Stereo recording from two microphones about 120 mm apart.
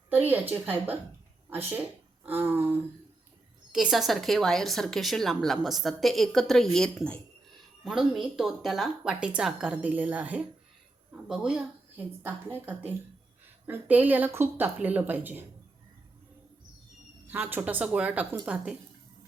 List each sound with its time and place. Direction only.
0.1 s speech: 15° right (ahead or behind)
3.7 s speech: 5° right (ahead or behind)
7.9 s speech: 5° right (ahead or behind)
11.9 s speech: 15° right (ahead or behind)
17.2 s speech: 15° right (ahead or behind)